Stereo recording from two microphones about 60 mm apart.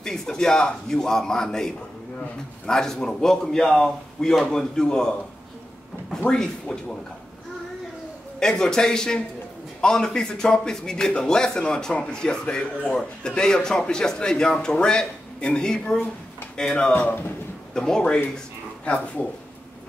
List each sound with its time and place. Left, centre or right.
0.0 s speech: centre
6.2 s speech: centre
8.4 s speech: centre
16.9 s speech: left
17.7 s speech: centre